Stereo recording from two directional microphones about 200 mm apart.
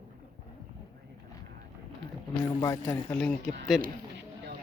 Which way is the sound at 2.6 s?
15° left (ahead or behind).